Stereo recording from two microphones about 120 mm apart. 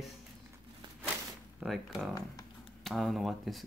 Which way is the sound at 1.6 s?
Centre (ahead or behind).